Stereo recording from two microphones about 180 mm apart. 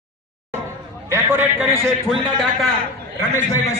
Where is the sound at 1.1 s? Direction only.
10° right (ahead or behind).